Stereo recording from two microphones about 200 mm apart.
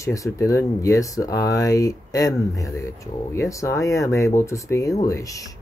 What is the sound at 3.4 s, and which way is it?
Speech, 15° left (ahead or behind).